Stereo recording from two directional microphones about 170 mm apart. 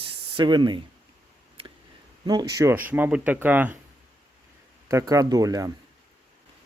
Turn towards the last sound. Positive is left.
turn(degrees=-20)  # may be behind; listen again after turning